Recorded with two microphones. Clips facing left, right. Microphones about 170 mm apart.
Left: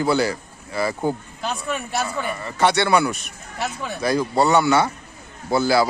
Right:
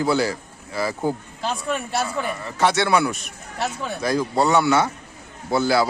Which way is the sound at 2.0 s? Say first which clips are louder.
Even; centre (ahead or behind).